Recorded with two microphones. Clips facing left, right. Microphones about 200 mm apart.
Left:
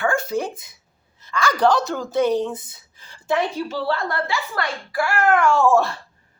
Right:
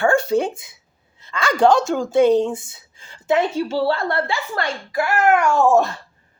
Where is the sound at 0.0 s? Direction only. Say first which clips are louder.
Right 5 dB; 30° right (ahead or behind).